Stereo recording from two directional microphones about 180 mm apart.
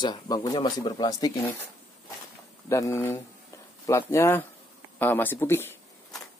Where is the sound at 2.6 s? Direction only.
15° left (ahead or behind).